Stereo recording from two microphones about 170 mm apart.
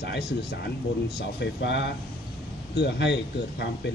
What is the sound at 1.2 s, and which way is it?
Speech, 85° left.